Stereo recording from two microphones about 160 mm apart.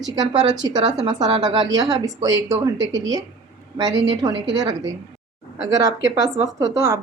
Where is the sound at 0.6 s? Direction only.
25° right (ahead or behind).